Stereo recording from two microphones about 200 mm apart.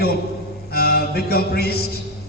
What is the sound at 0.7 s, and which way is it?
Music, 50° left (ahead or behind).